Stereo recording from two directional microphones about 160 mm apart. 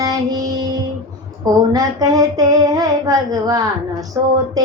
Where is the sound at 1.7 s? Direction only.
25° right (ahead or behind).